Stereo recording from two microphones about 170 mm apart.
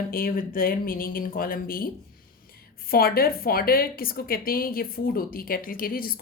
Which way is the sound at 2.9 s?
60° left (ahead or behind).